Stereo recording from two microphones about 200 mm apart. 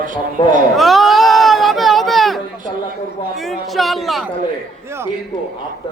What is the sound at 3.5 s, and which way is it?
Speech, centre (ahead or behind).